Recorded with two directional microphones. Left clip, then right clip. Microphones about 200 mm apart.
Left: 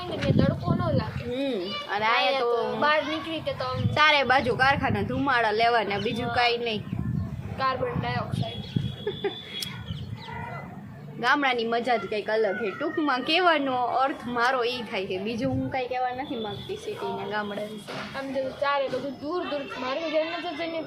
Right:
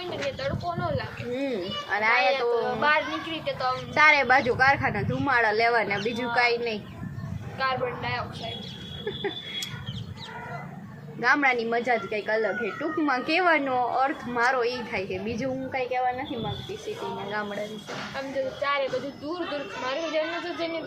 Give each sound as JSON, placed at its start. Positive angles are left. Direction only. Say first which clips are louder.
{"t": 0.3, "sound": "speech", "louder": "left 3 dB", "side_deg": 20}
{"t": 1.4, "sound": "speech", "louder": "left 1 dB", "side_deg": -5}
{"t": 3.4, "sound": "speech", "louder": "right 2 dB", "side_deg": 25}
{"t": 3.9, "sound": "speech", "louder": "right 1 dB", "side_deg": -5}
{"t": 7.6, "sound": "speech", "louder": "even", "side_deg": 25}
{"t": 11.2, "sound": "speech", "louder": "right 1 dB", "side_deg": -5}
{"t": 18.6, "sound": "speech", "louder": "left 1 dB", "side_deg": 20}
{"t": 20.2, "sound": "speech", "louder": "left 2 dB", "side_deg": 25}